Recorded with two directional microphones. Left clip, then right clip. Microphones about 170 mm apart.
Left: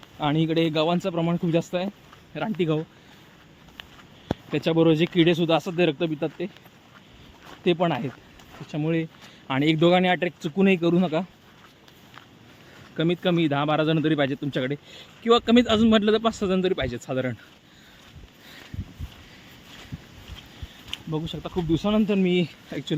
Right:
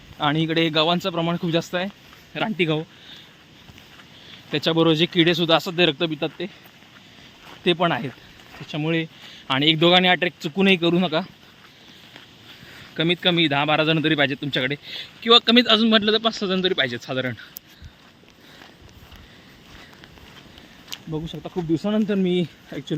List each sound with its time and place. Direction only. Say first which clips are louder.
0.2 s speech: right 2 dB; centre (ahead or behind)
4.5 s speech: right 2 dB; 5° left (ahead or behind)
7.6 s speech: right 3 dB; centre (ahead or behind)
10.0 s speech: right 4 dB; 5° right (ahead or behind)
13.0 s speech: right 4 dB; 5° left (ahead or behind)
21.1 s speech: even; 20° left (ahead or behind)
21.7 s speech: right 1 dB; 5° left (ahead or behind)